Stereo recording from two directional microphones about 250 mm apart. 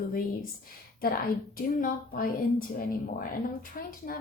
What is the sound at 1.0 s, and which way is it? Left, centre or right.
A woman's voice, left.